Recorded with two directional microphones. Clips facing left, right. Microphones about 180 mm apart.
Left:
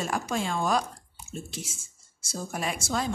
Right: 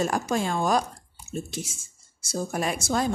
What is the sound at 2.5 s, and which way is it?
Speech, 45° right (ahead or behind).